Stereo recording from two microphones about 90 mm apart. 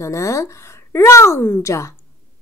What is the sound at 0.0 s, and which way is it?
A woman's voice, 35° left (ahead or behind).